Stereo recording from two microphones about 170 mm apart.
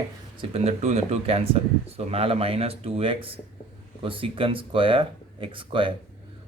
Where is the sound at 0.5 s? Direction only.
40° right (ahead or behind).